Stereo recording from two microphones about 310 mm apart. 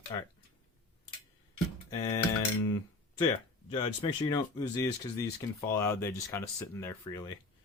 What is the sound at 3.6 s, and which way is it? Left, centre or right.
Speech, centre.